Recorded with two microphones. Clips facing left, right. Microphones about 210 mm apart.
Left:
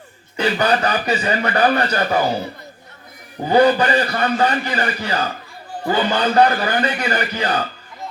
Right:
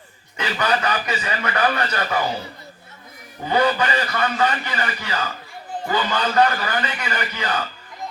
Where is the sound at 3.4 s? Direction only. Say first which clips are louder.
Left 6 dB; 35° left (ahead or behind).